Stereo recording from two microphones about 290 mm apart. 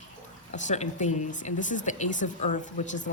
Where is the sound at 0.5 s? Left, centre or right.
Left.